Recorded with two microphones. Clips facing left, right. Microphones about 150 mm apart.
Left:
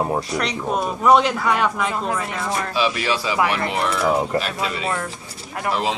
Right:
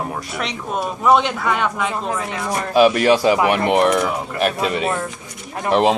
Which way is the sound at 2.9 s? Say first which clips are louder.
Right 9 dB; 50° right (ahead or behind).